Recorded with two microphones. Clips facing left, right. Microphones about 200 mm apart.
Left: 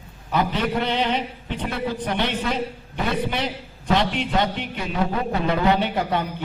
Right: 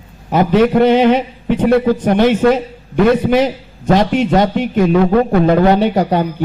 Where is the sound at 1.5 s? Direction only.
60° right (ahead or behind).